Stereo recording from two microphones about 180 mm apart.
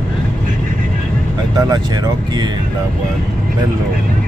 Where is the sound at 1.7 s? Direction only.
20° right (ahead or behind).